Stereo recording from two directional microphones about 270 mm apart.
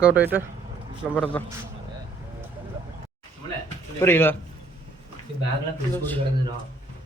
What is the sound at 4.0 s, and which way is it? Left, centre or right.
Speech, centre.